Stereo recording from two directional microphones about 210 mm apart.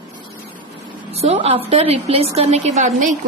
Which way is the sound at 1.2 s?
30° right (ahead or behind).